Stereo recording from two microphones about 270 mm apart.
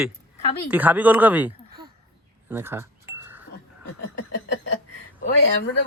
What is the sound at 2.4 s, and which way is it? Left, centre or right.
Chink, centre.